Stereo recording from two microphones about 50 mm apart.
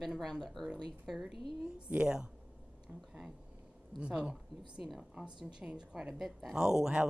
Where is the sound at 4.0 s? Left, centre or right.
Centre.